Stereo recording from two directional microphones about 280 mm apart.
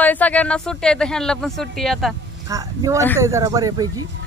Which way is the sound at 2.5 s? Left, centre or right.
Centre.